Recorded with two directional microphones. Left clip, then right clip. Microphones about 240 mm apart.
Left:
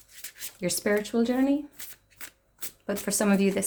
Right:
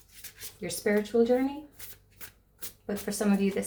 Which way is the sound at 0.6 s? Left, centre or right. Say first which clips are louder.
Left 2 dB; left.